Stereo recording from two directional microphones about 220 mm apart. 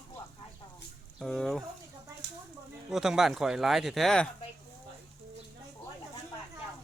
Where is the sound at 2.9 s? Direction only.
Centre (ahead or behind).